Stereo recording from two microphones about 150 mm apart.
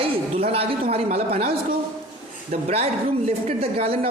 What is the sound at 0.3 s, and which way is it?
Speech, 40° right (ahead or behind).